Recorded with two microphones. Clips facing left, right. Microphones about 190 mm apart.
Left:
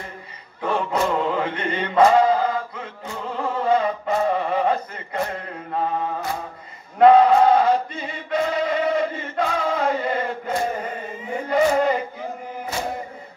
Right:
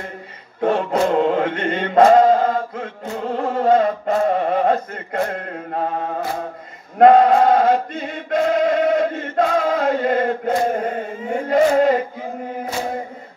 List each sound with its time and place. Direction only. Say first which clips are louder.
0.6 s chant: right 5 dB; 45° right (ahead or behind)
3.3 s music: right 5 dB; 40° right (ahead or behind)
7.1 s sheep: right 1 dB; 45° right (ahead or behind)
8.3 s chant: right 5 dB; 45° right (ahead or behind)
11.4 s a sound: right 4 dB; 50° right (ahead or behind)